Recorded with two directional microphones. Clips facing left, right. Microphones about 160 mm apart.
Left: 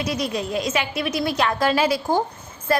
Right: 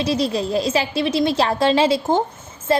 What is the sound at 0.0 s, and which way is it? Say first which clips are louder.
A woman's voice: right 5 dB; 30° right (ahead or behind).